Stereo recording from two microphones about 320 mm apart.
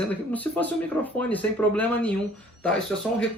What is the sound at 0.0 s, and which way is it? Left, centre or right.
Speech, centre.